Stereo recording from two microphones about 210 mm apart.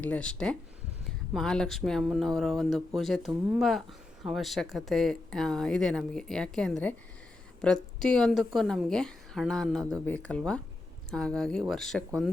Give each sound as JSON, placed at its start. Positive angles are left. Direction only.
{"t": 0.0, "sound": "speech", "side_deg": 5}